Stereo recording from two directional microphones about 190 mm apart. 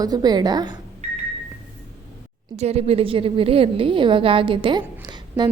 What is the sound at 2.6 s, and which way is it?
A woman's voice, 35° right (ahead or behind).